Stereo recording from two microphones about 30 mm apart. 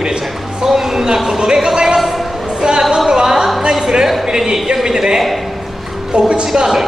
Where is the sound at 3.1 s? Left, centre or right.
Right.